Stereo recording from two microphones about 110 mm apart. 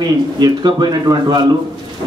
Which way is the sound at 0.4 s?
40° right (ahead or behind).